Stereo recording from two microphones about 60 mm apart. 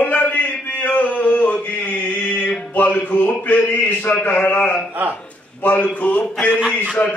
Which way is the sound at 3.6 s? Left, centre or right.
Left.